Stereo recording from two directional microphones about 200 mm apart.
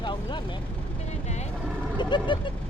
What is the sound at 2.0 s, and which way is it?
Speech, 25° left (ahead or behind).